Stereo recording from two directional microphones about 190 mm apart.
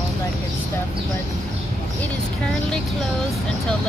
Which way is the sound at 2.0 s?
5° left (ahead or behind).